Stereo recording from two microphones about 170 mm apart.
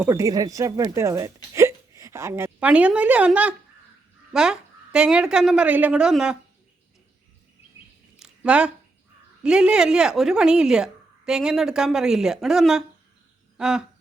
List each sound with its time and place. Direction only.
0.0 s a woman's voice: 15° right (ahead or behind)
8.2 s a sound: 5° right (ahead or behind)
9.4 s a woman's voice: 5° right (ahead or behind)